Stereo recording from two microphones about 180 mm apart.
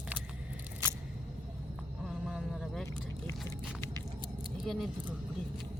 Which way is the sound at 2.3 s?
Centre (ahead or behind).